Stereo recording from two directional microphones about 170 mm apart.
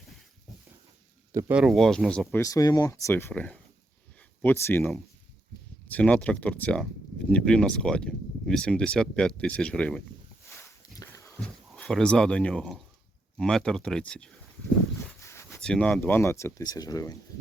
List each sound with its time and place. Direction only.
1.3 s speech: 20° right (ahead or behind)
1.5 s speech: centre (ahead or behind)
2.4 s speech: 20° left (ahead or behind)
10.6 s a sound: 15° left (ahead or behind)
11.7 s speech: 5° left (ahead or behind)
15.2 s a sound: 15° left (ahead or behind)
15.6 s speech: 5° left (ahead or behind); by 17.2 s 20° left (ahead or behind)